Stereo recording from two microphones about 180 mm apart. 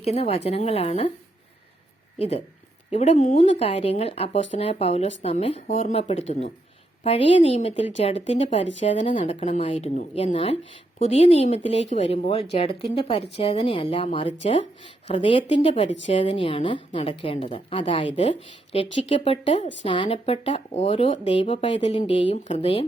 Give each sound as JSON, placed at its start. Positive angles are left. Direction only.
{"t": 0.0, "sound": "speech", "side_deg": 35}
{"t": 2.1, "sound": "speech", "side_deg": 35}